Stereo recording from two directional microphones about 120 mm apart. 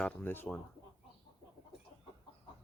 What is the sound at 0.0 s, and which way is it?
Speech, 15° left (ahead or behind).